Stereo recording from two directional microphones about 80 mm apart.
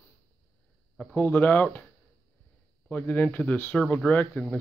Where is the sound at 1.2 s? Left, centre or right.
Left.